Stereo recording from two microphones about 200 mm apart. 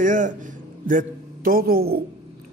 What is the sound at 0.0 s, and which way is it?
A man's voice, 40° right (ahead or behind).